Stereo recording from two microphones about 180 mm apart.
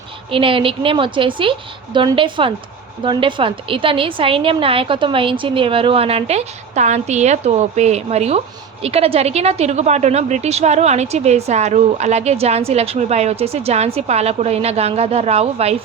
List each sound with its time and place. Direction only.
0.3 s a woman's voice: 30° right (ahead or behind)